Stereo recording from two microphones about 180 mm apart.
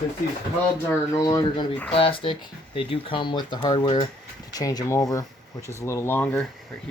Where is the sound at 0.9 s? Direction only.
15° left (ahead or behind).